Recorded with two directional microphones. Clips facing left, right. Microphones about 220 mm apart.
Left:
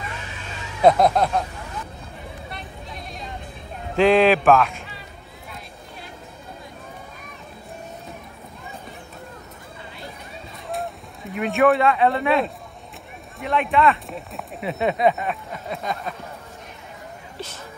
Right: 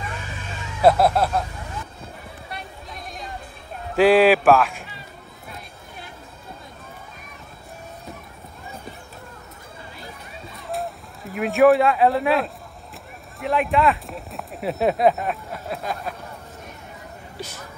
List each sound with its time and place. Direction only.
0.8 s speech: 5° right (ahead or behind)
3.9 s speech: 5° right (ahead or behind)
10.7 s speech: centre (ahead or behind)